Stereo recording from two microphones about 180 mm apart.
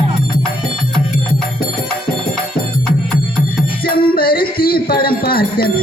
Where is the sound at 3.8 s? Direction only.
55° left (ahead or behind).